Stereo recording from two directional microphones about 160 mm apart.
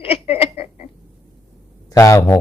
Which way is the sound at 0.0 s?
35° left (ahead or behind).